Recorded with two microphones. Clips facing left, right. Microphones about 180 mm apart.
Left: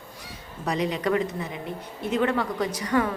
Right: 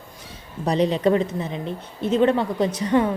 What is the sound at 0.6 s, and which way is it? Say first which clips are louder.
Speech: right 7 dB; 30° right (ahead or behind).